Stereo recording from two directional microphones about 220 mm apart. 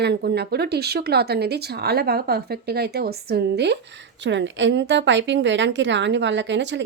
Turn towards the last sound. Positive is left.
turn(degrees=-55)  # may be behind; listen again after turning